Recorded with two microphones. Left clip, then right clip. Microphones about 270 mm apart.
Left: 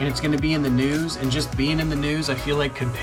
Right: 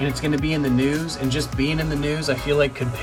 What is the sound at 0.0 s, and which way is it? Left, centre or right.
Speech, centre.